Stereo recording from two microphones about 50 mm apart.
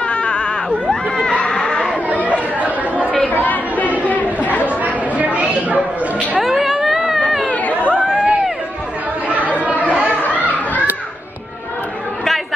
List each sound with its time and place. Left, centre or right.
0.1 s a sound: left
3.3 s chatter: left
4.8 s chatter: right
6.4 s music: centre
7.6 s chatter: left
8.1 s a sound: centre
10.2 s children playing: left